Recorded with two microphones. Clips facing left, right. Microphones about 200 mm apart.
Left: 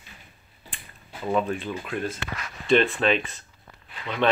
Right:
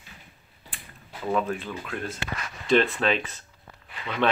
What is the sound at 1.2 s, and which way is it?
Speech, 5° left (ahead or behind).